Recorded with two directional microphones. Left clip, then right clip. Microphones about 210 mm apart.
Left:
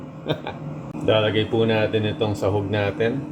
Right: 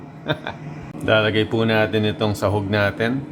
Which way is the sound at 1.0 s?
50° right (ahead or behind).